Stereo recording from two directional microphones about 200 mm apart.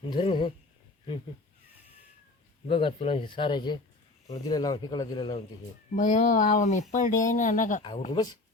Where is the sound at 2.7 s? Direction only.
25° left (ahead or behind).